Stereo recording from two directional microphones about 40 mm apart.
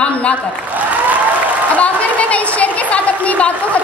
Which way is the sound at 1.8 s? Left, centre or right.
Left.